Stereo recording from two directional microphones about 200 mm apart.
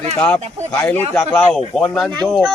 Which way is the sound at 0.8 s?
10° left (ahead or behind).